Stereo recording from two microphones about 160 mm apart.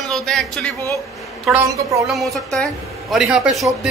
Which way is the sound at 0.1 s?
5° left (ahead or behind).